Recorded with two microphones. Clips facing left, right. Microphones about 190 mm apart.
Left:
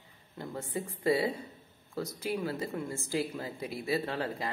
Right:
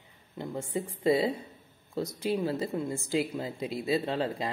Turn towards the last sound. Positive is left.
turn(degrees=-20)  # may be behind; listen again after turning